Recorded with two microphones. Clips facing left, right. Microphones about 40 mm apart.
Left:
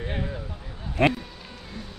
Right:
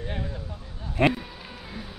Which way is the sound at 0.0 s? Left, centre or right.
Left.